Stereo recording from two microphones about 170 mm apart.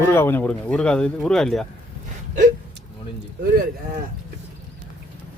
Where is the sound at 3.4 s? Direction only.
60° right (ahead or behind).